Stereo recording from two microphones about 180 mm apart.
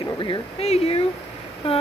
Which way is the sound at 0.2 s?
30° left (ahead or behind).